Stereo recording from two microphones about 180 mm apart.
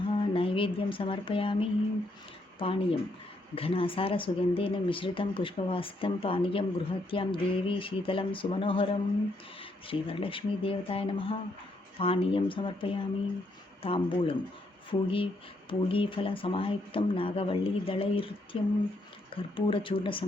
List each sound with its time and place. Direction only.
0.1 s a woman's voice: 30° left (ahead or behind)